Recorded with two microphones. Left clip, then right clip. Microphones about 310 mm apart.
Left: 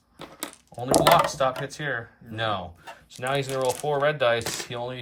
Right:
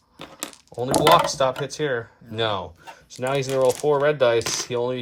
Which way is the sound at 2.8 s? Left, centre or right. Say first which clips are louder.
Right 4 dB; centre.